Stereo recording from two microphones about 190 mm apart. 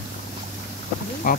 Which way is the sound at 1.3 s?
45° left (ahead or behind).